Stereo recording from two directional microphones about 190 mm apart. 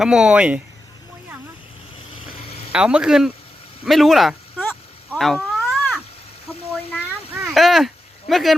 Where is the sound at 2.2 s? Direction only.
30° left (ahead or behind).